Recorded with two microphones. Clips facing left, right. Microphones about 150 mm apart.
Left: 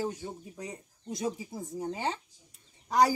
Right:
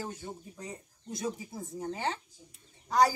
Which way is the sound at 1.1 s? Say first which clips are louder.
Left 2 dB; 15° left (ahead or behind).